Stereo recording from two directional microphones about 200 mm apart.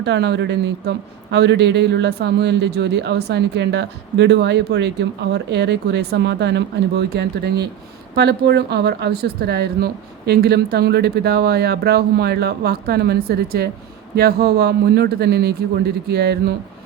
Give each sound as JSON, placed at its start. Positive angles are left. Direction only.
{"t": 0.0, "sound": "speech", "side_deg": -60}